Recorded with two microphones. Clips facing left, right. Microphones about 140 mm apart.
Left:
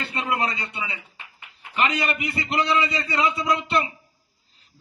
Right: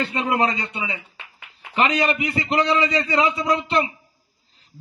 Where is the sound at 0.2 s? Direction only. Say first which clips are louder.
Right 3 dB; 35° right (ahead or behind).